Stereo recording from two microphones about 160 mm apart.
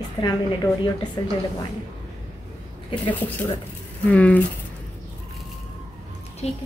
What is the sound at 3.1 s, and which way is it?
Speech, 10° left (ahead or behind).